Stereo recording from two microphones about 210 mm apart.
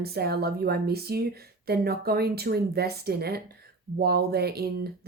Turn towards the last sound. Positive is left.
turn(degrees=-50)  # may be behind; listen again after turning